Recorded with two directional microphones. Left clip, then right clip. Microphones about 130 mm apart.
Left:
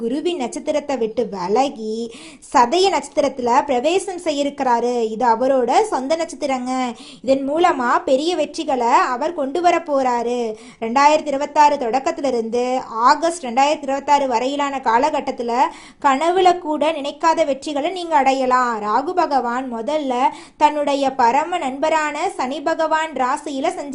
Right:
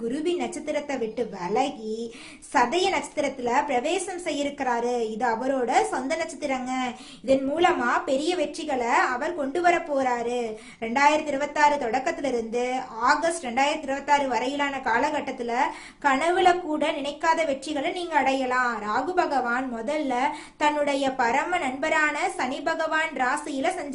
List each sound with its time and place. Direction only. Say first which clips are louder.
0.1 s a woman's voice: left 5 dB; 45° left (ahead or behind)